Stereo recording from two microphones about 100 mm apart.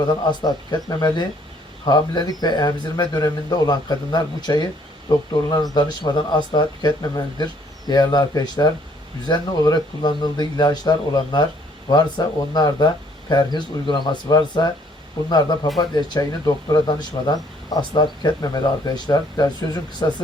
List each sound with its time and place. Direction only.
0.3 s speech: 40° left (ahead or behind)